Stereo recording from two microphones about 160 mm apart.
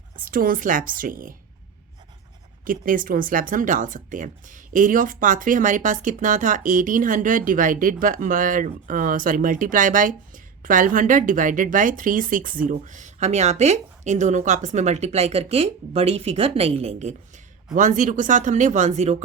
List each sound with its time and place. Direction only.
0.3 s speech: 60° right (ahead or behind)
2.6 s speech: 60° right (ahead or behind); by 19.2 s 45° right (ahead or behind)